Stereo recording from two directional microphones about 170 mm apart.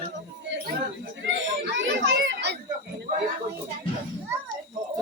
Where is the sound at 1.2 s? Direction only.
90° right.